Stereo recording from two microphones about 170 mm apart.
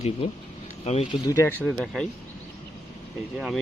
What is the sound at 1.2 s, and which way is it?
Speech, 15° left (ahead or behind).